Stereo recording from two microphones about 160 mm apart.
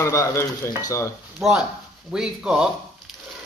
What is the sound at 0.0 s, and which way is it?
Speech, 20° left (ahead or behind).